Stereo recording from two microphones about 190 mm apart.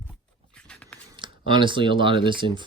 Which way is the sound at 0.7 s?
5° left (ahead or behind).